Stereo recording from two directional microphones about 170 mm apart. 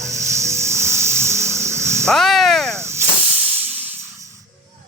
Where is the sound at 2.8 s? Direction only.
15° right (ahead or behind).